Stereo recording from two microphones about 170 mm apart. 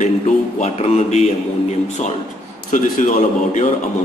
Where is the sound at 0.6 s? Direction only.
40° left (ahead or behind).